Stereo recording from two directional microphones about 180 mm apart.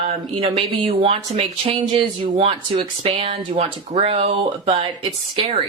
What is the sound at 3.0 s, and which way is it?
A woman's voice, 30° right (ahead or behind).